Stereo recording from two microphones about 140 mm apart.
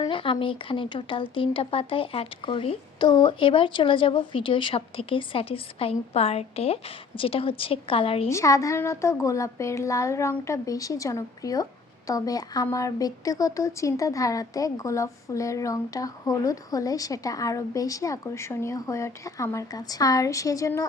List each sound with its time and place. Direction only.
0.0 s speech: 35° left (ahead or behind)
8.3 s speech: 20° left (ahead or behind)